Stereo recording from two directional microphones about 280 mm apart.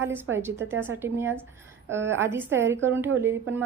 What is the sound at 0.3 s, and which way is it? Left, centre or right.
Speech, right.